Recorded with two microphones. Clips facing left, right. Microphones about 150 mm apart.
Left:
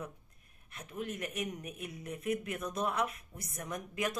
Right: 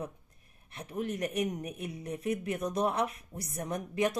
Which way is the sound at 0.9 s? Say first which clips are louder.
Right 6 dB; 35° right (ahead or behind).